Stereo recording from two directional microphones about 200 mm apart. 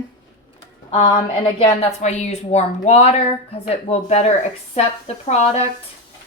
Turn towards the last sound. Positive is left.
turn(degrees=30)  # may be behind; listen again after turning